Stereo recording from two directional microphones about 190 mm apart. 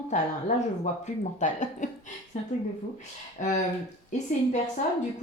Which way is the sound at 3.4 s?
40° left (ahead or behind).